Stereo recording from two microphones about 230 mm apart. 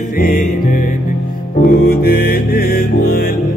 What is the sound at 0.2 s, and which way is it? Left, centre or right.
Music, left.